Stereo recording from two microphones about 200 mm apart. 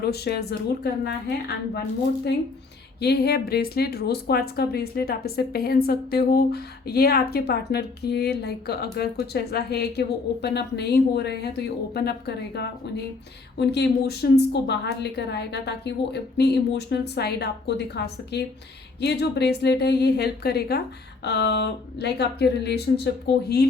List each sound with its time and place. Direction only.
0.0 s a woman's voice: 55° left (ahead or behind)
3.0 s a woman's voice: 50° left (ahead or behind)